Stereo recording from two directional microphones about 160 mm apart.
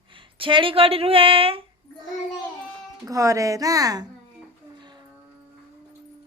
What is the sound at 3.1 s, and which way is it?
A woman's voice, 20° right (ahead or behind).